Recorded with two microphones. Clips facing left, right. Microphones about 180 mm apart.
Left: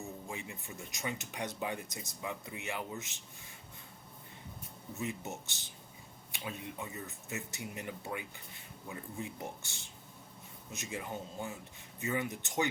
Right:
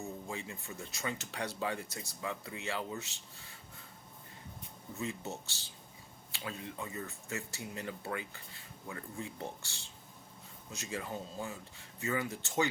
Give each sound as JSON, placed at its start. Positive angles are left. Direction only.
{"t": 0.3, "sound": "speech", "side_deg": 15}
{"t": 4.9, "sound": "speech", "side_deg": 20}